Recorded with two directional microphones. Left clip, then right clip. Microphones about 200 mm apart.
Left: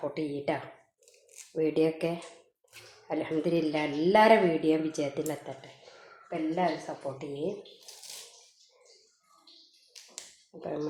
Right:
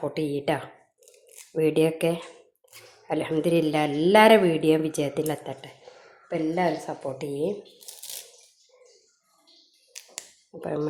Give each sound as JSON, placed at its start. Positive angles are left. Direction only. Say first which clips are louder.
{"t": 0.1, "sound": "speech", "louder": "right 5 dB", "side_deg": -35}
{"t": 6.2, "sound": "speech", "louder": "right 4 dB", "side_deg": -50}
{"t": 10.6, "sound": "speech", "louder": "right 6 dB", "side_deg": -35}